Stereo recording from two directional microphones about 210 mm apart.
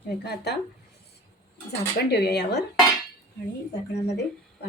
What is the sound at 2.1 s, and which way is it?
Speech, 50° left (ahead or behind).